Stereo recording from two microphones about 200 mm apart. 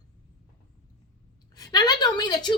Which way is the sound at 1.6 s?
20° left (ahead or behind).